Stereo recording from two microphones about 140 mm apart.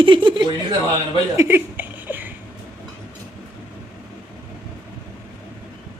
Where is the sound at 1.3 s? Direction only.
15° right (ahead or behind).